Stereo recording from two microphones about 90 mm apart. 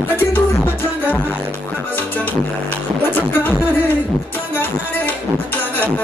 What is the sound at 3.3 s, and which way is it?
Music, 25° left (ahead or behind).